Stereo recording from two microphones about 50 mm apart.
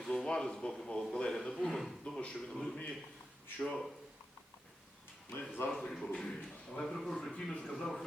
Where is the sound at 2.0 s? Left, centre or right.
Centre.